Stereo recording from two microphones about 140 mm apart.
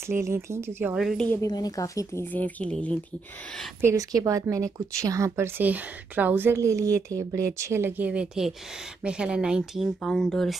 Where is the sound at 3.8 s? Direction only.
20° right (ahead or behind).